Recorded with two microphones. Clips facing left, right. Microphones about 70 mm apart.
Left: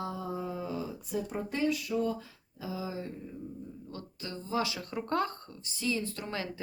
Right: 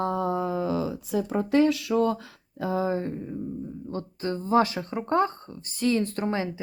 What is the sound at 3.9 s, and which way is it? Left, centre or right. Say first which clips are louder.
Speech: right 13 dB; right.